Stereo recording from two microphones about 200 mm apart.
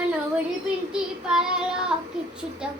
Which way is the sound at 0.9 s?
5° right (ahead or behind).